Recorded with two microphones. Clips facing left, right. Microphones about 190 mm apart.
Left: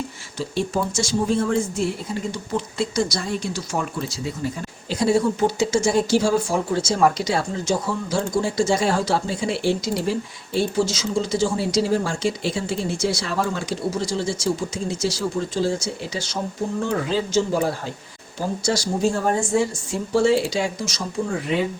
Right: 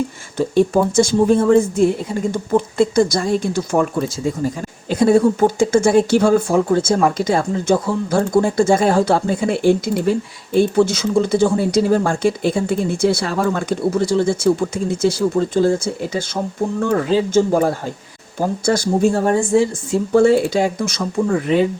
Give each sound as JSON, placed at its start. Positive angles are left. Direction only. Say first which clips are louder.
{"t": 0.3, "sound": "speech", "louder": "right 9 dB", "side_deg": -55}